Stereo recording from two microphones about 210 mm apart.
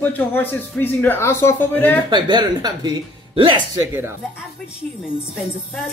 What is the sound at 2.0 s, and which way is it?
Speech, 20° right (ahead or behind).